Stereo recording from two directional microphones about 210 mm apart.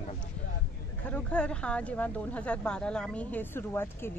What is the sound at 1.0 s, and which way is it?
Speech, 5° left (ahead or behind).